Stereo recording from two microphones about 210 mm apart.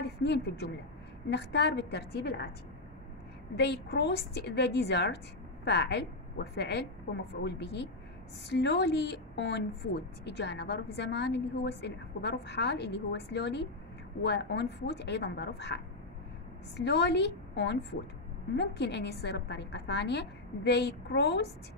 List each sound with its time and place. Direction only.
0.0 s a sound: 55° left (ahead or behind)
1.3 s a woman's voice: 55° left (ahead or behind)
3.5 s a woman's voice: 50° left (ahead or behind)